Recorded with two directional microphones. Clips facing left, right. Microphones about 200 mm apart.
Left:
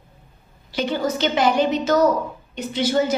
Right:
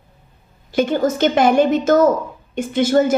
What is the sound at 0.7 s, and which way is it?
A woman's voice, 50° right (ahead or behind).